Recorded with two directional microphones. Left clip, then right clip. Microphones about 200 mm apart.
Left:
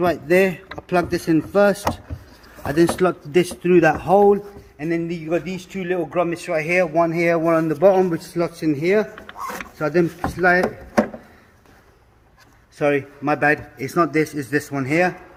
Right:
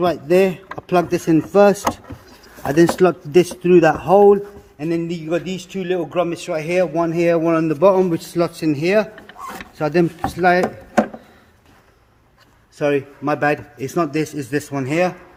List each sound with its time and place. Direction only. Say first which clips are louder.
0.0 s a man's voice: right 2 dB; 20° right (ahead or behind)
3.6 s speech: even; 20° right (ahead or behind)
4.8 s a man's voice: right 1 dB; 40° right (ahead or behind)
8.1 s a man's voice: right 3 dB; 70° right (ahead or behind)
12.8 s a man's voice: right 1 dB; 25° right (ahead or behind)